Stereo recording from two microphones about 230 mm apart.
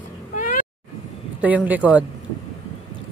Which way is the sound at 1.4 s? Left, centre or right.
Centre.